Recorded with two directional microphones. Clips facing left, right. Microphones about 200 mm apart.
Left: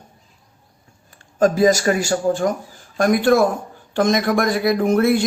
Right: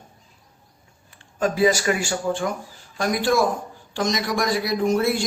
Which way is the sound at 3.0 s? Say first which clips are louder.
Left 6 dB; 55° left (ahead or behind).